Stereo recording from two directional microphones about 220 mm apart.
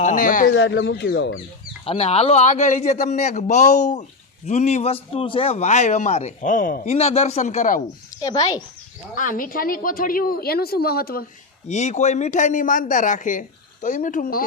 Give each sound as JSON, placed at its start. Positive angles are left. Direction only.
{"t": 0.0, "sound": "a man's voice", "side_deg": 35}
{"t": 0.5, "sound": "speech", "side_deg": 55}
{"t": 1.8, "sound": "a man's voice", "side_deg": 25}
{"t": 9.1, "sound": "a man's voice", "side_deg": 40}
{"t": 11.7, "sound": "a man's voice", "side_deg": 30}